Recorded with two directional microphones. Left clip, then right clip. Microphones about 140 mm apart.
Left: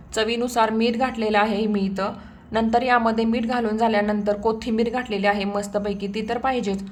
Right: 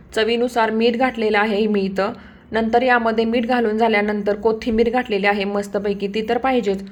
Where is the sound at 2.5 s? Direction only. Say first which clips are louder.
Right 3 dB; 10° right (ahead or behind).